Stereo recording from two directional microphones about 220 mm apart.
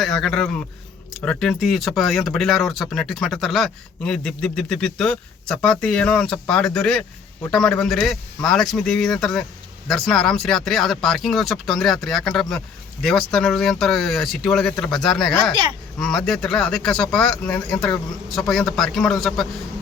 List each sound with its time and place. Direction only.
0.0 s speech: centre (ahead or behind)